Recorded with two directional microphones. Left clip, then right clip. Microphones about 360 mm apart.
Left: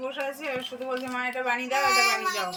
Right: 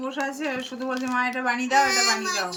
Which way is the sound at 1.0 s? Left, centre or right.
Centre.